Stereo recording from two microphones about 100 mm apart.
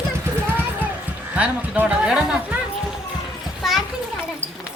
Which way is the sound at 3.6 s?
Centre (ahead or behind).